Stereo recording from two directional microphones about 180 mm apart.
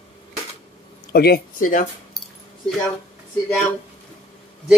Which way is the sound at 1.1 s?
60° left (ahead or behind).